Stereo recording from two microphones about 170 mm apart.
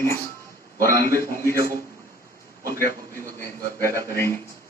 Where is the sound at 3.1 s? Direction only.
15° left (ahead or behind).